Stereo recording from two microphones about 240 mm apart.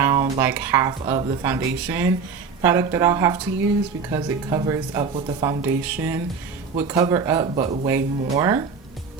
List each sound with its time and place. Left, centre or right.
0.0 s speech: centre
7.9 s speech: centre